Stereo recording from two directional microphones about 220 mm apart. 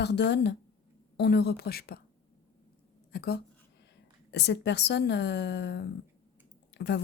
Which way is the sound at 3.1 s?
45° left (ahead or behind).